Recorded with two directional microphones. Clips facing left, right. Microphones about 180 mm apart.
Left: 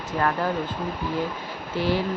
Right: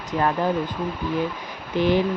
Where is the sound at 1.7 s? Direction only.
20° right (ahead or behind).